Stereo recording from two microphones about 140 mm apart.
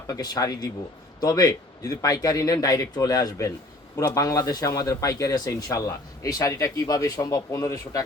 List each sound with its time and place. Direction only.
0.1 s speech: 25° left (ahead or behind)